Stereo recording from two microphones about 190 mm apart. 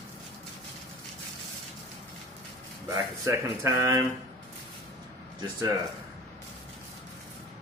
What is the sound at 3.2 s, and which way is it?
Speech, 15° right (ahead or behind).